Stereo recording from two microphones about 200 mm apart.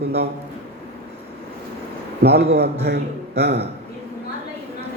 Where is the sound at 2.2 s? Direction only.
55° right (ahead or behind).